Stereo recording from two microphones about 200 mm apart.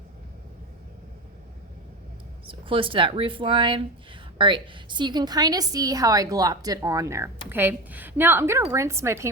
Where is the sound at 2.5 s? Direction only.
25° right (ahead or behind).